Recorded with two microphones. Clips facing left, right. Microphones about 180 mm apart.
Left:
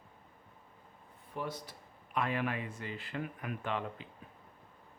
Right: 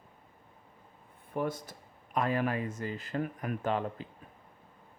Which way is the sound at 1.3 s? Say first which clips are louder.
Right 7 dB; 50° right (ahead or behind).